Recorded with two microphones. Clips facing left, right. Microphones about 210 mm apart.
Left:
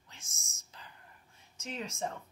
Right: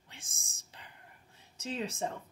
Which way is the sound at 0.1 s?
30° right (ahead or behind).